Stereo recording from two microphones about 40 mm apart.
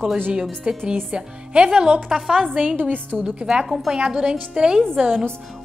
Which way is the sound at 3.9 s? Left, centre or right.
Right.